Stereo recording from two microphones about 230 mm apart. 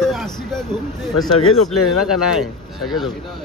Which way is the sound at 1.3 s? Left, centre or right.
Left.